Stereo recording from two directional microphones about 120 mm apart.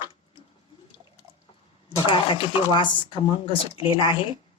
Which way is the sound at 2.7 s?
40° left (ahead or behind).